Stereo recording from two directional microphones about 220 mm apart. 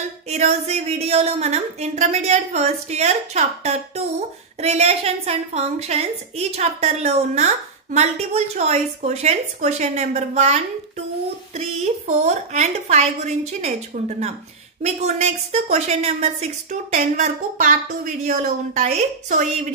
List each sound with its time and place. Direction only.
0.3 s a woman's voice: 30° right (ahead or behind)